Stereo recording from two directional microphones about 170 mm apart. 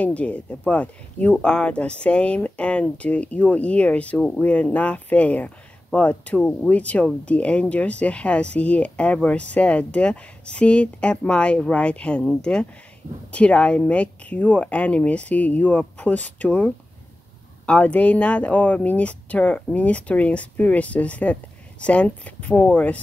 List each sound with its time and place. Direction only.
0.0 s speech: 10° left (ahead or behind)